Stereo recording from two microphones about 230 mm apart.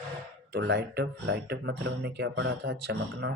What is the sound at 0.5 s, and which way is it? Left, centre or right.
Speech, right.